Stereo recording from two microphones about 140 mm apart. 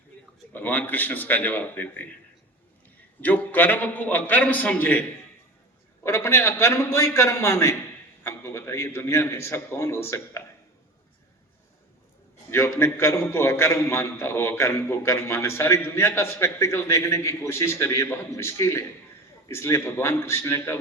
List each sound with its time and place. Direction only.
0.5 s a man's voice: 15° left (ahead or behind)
3.2 s a man's voice: 10° left (ahead or behind)
12.5 s a man's voice: 20° left (ahead or behind)